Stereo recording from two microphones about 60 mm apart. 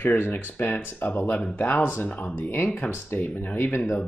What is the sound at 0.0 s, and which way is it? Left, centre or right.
Speech, left.